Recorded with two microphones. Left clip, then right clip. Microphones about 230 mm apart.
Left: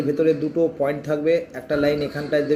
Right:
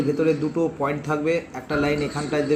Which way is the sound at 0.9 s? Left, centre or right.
Centre.